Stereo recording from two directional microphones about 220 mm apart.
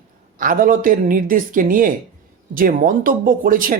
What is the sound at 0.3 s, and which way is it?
Speech, 40° right (ahead or behind).